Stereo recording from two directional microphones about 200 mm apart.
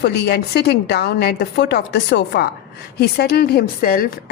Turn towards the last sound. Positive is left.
turn(degrees=50)  # may be behind; listen again after turning